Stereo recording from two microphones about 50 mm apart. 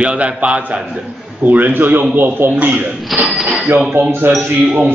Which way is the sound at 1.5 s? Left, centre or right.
Right.